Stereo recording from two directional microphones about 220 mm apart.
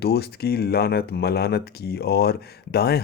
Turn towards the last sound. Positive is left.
turn(degrees=45)  # may be behind; listen again after turning